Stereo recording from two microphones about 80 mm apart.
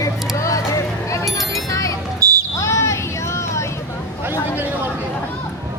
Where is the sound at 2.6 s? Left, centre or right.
Left.